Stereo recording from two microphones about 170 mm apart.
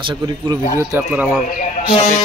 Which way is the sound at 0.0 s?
25° right (ahead or behind).